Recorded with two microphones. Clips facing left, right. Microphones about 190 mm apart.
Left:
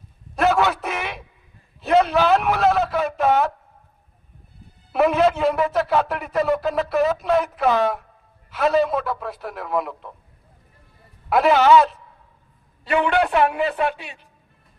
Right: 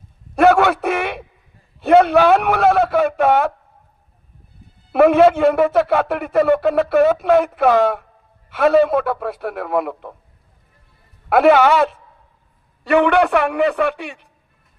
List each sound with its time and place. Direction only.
0.4 s a sound: 55° right (ahead or behind)
4.9 s a man's voice: 55° right (ahead or behind)
11.2 s a man's voice: 60° right (ahead or behind)